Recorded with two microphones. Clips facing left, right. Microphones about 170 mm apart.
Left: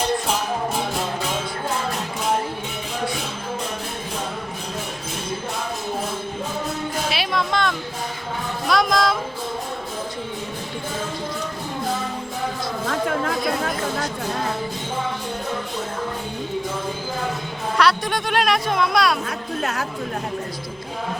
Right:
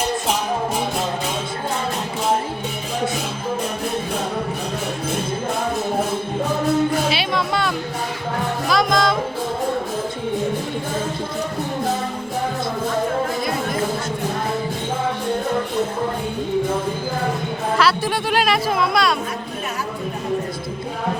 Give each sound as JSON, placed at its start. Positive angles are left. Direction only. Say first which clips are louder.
{"t": 7.1, "sound": "music", "louder": "right 2 dB", "side_deg": 0}
{"t": 12.9, "sound": "music", "louder": "right 1 dB", "side_deg": 90}
{"t": 13.4, "sound": "chatter", "louder": "even", "side_deg": 0}
{"t": 17.7, "sound": "music", "louder": "even", "side_deg": -5}